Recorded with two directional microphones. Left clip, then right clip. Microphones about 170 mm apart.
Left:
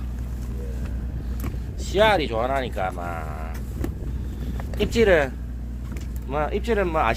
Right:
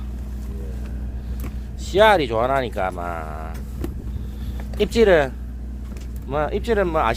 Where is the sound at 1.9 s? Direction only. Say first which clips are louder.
Right 4 dB; 45° right (ahead or behind).